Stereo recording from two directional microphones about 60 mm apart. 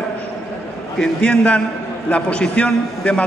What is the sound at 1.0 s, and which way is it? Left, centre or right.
A man's voice, centre.